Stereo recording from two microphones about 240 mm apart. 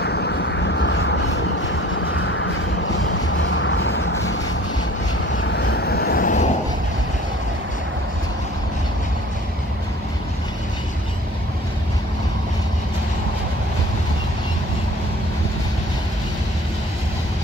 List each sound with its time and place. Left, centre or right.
0.0 s vehicle: left